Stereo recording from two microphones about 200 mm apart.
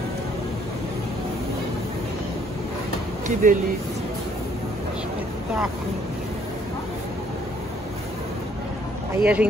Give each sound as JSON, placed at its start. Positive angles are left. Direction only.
{"t": 3.4, "sound": "speech", "side_deg": -40}
{"t": 9.1, "sound": "speech", "side_deg": -5}